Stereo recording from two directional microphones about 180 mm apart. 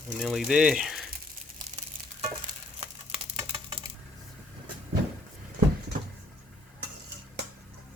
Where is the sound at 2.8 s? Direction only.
35° right (ahead or behind).